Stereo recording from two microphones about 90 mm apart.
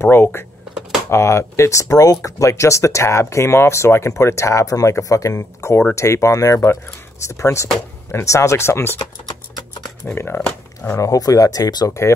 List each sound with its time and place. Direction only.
0.0 s speech: 25° left (ahead or behind)
10.1 s speech: 20° left (ahead or behind)
11.0 s speech: 40° left (ahead or behind)